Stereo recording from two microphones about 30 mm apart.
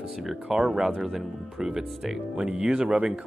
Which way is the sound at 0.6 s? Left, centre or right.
Centre.